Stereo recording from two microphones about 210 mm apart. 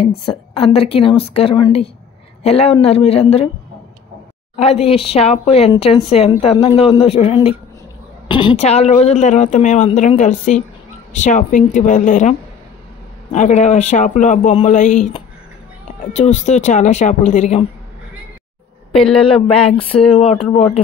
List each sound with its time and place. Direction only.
0.2 s a woman's voice: 25° left (ahead or behind)
4.6 s a woman's voice: 30° left (ahead or behind)
19.1 s a woman's voice: 25° left (ahead or behind)